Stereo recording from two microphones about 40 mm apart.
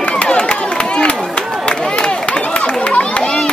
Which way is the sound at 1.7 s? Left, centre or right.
Left.